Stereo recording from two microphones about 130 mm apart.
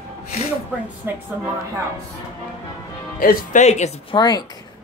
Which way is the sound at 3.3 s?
65° left (ahead or behind).